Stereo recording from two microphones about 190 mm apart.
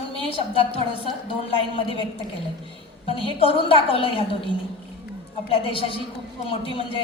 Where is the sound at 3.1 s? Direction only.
30° left (ahead or behind).